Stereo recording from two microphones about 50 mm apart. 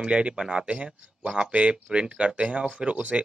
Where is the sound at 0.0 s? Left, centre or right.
Right.